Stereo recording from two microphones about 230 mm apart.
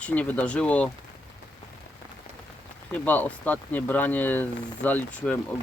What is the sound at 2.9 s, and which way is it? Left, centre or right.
Speech, centre.